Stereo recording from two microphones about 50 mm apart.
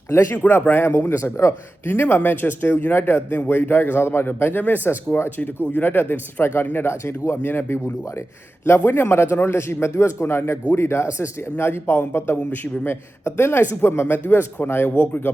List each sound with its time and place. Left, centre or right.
0.3 s a man's voice: left
1.1 s a man's voice: left
1.9 s speech: left
3.4 s speech: left
6.8 s a man's voice: left
7.4 s a man's voice: left
14.3 s a man's voice: left
14.7 s speech: left